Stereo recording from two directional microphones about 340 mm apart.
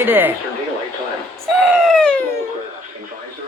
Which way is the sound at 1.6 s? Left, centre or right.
Centre.